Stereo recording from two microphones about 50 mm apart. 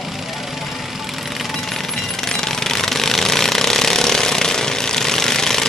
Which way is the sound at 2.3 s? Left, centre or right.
Centre.